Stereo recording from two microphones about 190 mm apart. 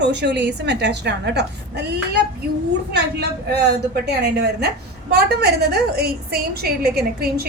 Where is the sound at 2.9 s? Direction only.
60° right (ahead or behind).